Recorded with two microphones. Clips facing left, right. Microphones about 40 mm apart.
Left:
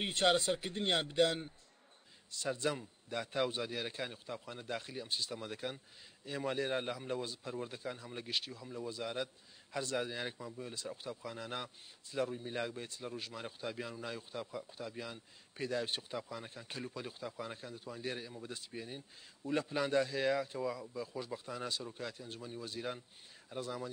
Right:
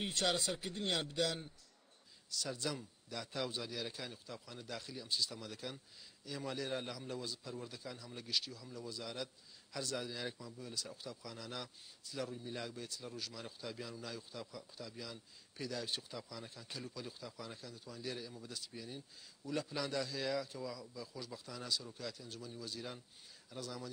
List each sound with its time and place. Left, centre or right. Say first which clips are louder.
0.0 s a man's voice: left 5 dB; left